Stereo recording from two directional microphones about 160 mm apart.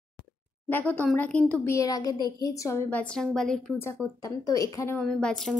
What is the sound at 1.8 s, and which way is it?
Speech, 20° left (ahead or behind).